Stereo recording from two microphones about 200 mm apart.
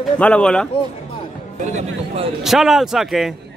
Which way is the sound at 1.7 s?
35° right (ahead or behind).